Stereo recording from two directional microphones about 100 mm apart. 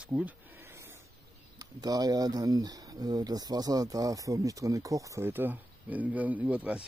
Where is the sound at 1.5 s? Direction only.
40° right (ahead or behind).